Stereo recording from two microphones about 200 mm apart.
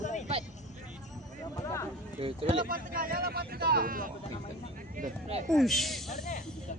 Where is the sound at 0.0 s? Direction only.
35° left (ahead or behind).